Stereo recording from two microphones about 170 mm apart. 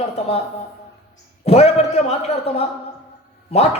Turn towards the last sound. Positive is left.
turn(degrees=40)  # may be behind; listen again after turning